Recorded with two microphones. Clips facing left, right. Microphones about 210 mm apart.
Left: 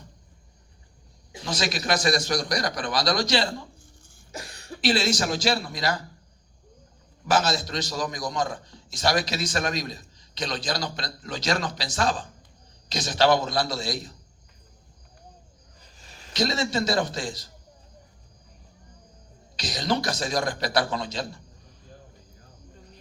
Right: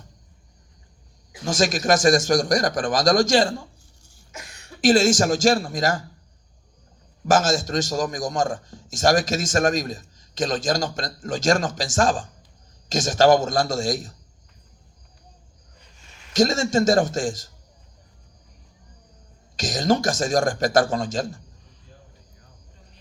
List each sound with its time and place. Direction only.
1.5 s a man's voice: 45° right (ahead or behind)
4.3 s cough: 35° left (ahead or behind)
4.8 s a man's voice: 45° right (ahead or behind)
7.3 s a man's voice: 45° right (ahead or behind)
15.8 s a sound: 35° left (ahead or behind)
16.3 s a man's voice: 45° right (ahead or behind)
19.5 s a man's voice: 45° right (ahead or behind)